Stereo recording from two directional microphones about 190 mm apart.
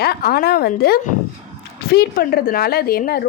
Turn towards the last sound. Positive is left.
turn(degrees=50)  # may be behind; listen again after turning